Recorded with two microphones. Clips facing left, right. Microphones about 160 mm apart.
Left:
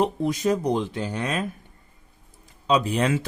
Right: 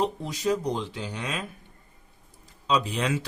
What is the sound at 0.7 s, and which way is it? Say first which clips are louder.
Speech: left 6 dB; 50° left (ahead or behind).